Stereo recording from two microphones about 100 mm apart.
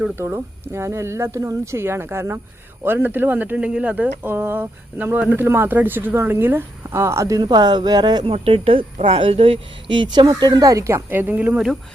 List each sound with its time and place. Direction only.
0.2 s speech: 25° right (ahead or behind); by 8.3 s 45° right (ahead or behind)
8.3 s speech: 70° right (ahead or behind); by 10.2 s 55° right (ahead or behind)
10.2 s speech: 40° right (ahead or behind); by 11.8 s 10° right (ahead or behind)